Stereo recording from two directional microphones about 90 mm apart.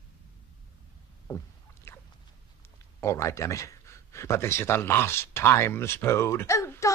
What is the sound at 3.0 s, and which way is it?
A man's voice, 30° left (ahead or behind).